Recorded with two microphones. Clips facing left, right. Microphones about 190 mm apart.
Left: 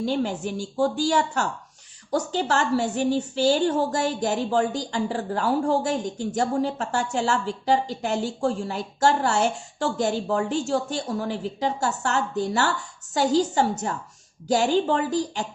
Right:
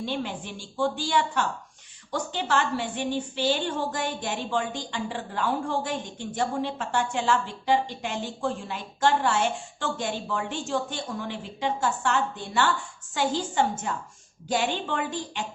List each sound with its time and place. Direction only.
0.0 s a woman's voice: 40° left (ahead or behind)